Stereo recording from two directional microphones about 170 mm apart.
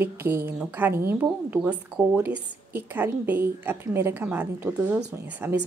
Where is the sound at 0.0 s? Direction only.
15° right (ahead or behind).